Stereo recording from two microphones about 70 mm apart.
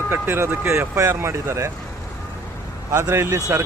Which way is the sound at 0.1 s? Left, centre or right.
Right.